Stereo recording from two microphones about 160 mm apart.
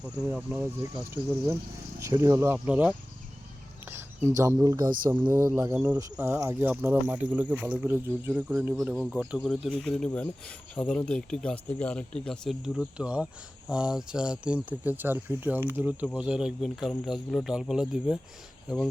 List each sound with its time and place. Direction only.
0.3 s speech: 10° right (ahead or behind)
4.3 s speech: 20° right (ahead or behind); by 18.2 s 5° right (ahead or behind)